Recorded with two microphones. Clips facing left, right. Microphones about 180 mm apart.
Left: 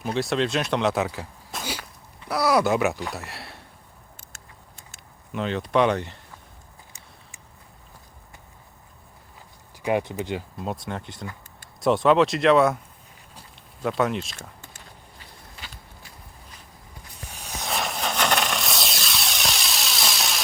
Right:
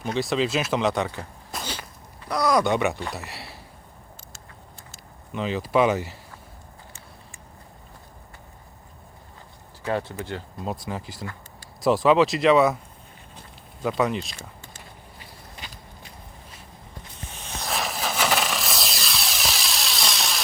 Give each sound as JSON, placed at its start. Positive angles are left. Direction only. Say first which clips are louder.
{"t": 0.0, "sound": "speech", "louder": "even", "side_deg": 0}
{"t": 5.3, "sound": "speech", "louder": "even", "side_deg": 0}
{"t": 9.8, "sound": "speech", "louder": "left 3 dB", "side_deg": 15}
{"t": 10.6, "sound": "speech", "louder": "even", "side_deg": 0}
{"t": 13.8, "sound": "speech", "louder": "even", "side_deg": 0}
{"t": 15.5, "sound": "walk", "louder": "right 2 dB", "side_deg": -20}
{"t": 17.6, "sound": "vehicle", "louder": "even", "side_deg": 0}